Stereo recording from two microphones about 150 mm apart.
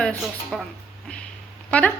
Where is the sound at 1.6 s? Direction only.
10° left (ahead or behind).